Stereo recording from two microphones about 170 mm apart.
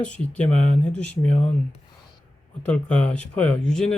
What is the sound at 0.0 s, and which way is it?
Speech, 5° left (ahead or behind).